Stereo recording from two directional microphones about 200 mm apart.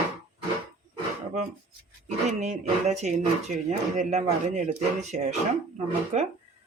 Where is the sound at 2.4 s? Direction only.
35° right (ahead or behind).